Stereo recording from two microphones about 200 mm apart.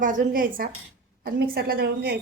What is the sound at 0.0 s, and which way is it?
A woman's voice, 45° right (ahead or behind).